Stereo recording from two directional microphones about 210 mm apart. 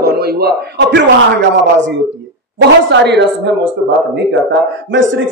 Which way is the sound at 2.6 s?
55° right (ahead or behind).